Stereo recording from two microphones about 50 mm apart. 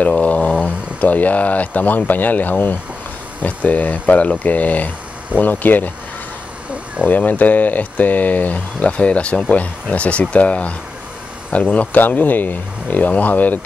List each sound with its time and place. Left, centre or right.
0.0 s speech: left
7.1 s speech: left